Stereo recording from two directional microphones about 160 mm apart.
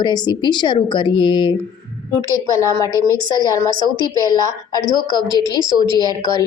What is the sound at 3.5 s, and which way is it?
Speech, 25° left (ahead or behind).